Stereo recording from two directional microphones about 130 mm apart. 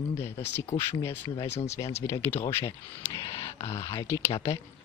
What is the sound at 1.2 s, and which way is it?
Speech, 40° left (ahead or behind).